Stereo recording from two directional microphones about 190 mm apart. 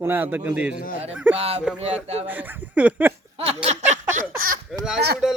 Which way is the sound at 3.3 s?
30° right (ahead or behind).